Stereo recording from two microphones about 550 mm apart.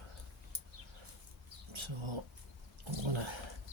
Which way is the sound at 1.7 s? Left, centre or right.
Right.